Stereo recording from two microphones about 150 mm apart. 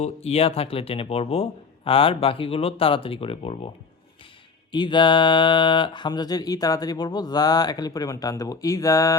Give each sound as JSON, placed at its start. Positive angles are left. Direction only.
{"t": 0.0, "sound": "speech", "side_deg": 45}
{"t": 4.7, "sound": "music", "side_deg": 30}